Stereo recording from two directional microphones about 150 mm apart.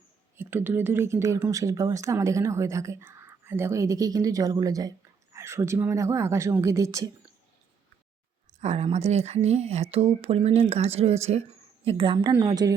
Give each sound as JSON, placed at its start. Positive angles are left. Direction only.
{"t": 0.3, "sound": "speech", "side_deg": -15}
{"t": 8.6, "sound": "speech", "side_deg": -50}
{"t": 11.9, "sound": "speech", "side_deg": -35}